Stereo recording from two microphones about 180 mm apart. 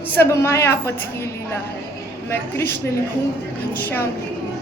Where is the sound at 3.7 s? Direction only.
10° left (ahead or behind).